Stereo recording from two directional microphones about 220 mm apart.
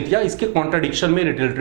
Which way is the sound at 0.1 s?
25° right (ahead or behind).